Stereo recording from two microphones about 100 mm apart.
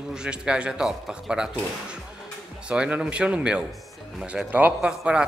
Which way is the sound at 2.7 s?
10° right (ahead or behind).